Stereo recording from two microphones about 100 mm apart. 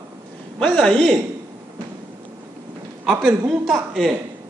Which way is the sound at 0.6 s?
10° left (ahead or behind).